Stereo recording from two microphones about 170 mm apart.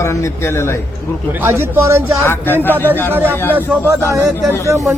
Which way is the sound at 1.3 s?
15° right (ahead or behind).